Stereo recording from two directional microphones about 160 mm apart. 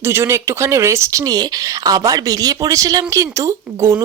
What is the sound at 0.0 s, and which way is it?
Speech, 15° right (ahead or behind).